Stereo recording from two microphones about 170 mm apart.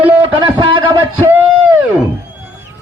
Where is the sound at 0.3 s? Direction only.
30° right (ahead or behind).